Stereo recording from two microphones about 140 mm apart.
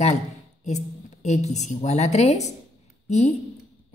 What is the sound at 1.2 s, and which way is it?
Speech, 55° left (ahead or behind).